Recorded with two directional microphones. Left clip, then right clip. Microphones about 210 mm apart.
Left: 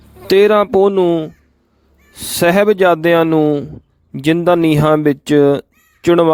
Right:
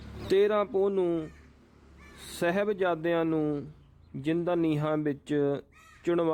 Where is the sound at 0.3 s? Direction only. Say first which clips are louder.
Left 15 dB; 45° left (ahead or behind).